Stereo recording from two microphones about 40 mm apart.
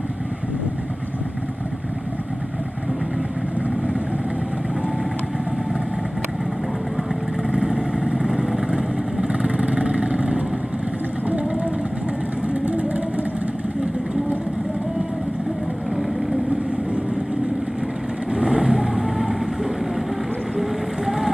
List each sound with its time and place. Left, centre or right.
7.5 s vehicle: centre; by 13.0 s right
18.3 s vehicle: centre
20.5 s vehicle: centre